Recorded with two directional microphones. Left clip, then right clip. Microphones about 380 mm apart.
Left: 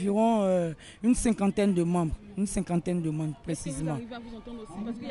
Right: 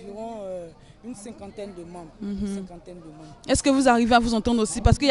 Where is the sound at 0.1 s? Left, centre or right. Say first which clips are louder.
Left 9 dB; left.